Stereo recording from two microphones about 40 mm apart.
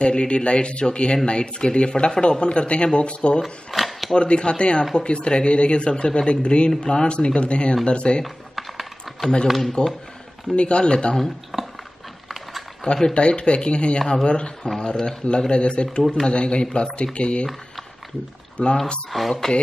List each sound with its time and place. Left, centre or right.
0.0 s speech: left
3.7 s a sound: centre
4.1 s speech: left
8.5 s a sound: centre
9.5 s speech: centre
10.5 s speech: left
11.5 s dog: centre
12.3 s a sound: centre
12.8 s speech: left
18.6 s speech: left
19.0 s speech: centre